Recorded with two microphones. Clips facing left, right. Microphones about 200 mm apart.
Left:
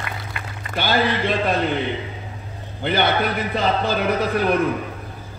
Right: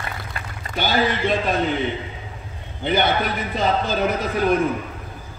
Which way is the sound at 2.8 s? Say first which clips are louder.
Even; 55° left (ahead or behind).